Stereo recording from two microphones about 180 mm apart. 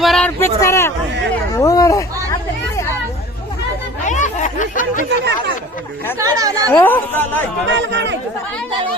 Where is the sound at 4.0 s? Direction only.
45° left (ahead or behind).